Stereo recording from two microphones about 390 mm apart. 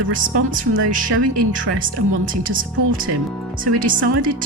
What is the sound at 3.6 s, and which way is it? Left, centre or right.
Speech, right.